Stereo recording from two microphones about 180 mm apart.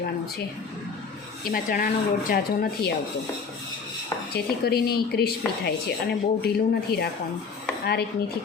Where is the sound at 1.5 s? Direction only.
50° left (ahead or behind).